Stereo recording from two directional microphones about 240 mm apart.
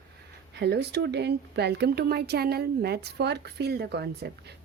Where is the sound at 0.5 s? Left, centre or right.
Right.